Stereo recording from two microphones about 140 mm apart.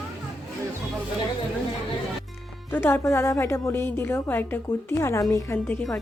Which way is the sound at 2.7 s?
15° left (ahead or behind).